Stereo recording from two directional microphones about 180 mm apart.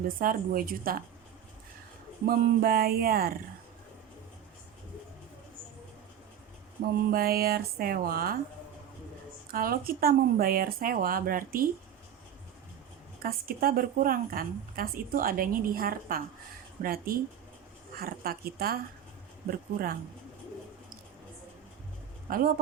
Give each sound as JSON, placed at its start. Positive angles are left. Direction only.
{"t": 0.2, "sound": "a woman's voice", "side_deg": -50}
{"t": 2.2, "sound": "speech", "side_deg": -55}
{"t": 7.1, "sound": "speech", "side_deg": -55}
{"t": 9.5, "sound": "a woman's voice", "side_deg": -55}
{"t": 13.2, "sound": "a woman's voice", "side_deg": -55}
{"t": 22.3, "sound": "a woman's voice", "side_deg": -55}